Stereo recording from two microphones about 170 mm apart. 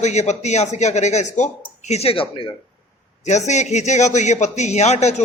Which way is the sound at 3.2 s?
45° left (ahead or behind).